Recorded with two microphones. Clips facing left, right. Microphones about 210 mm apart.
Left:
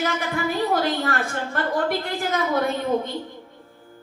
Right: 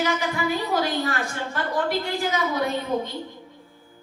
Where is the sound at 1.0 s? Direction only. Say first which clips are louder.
Left 1 dB; 55° left (ahead or behind).